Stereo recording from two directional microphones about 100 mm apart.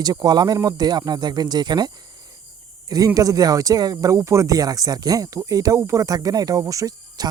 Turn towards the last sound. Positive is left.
turn(degrees=-35)  # may be behind; listen again after turning